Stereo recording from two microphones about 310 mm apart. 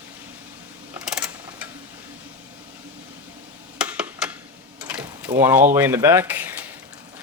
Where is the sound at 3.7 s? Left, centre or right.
Centre.